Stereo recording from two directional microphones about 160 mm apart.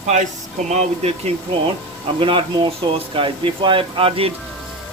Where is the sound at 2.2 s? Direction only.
30° right (ahead or behind).